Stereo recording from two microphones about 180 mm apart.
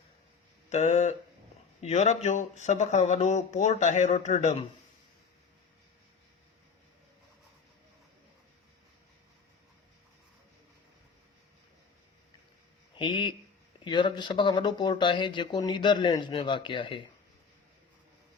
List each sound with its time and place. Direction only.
0.7 s speech: 40° left (ahead or behind)
13.0 s a sound: 25° left (ahead or behind)
13.8 s speech: 25° left (ahead or behind)